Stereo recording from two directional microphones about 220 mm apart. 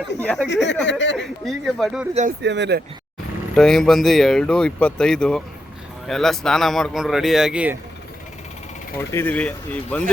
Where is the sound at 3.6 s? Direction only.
Centre (ahead or behind).